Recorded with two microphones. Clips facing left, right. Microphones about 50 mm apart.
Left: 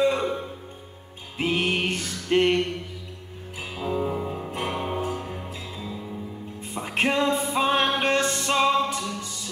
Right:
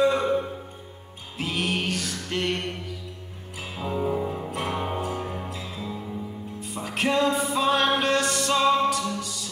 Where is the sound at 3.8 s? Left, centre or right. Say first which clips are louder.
Even; centre.